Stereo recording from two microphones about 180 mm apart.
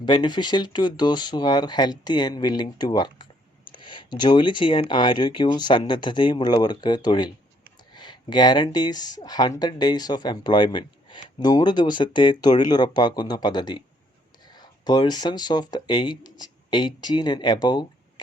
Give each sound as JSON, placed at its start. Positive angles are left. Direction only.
{"t": 0.0, "sound": "speech", "side_deg": 25}